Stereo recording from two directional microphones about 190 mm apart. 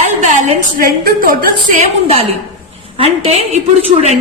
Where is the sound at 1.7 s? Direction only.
35° right (ahead or behind).